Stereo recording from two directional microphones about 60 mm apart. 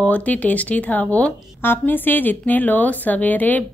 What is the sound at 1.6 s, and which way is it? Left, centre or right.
A woman's voice, left.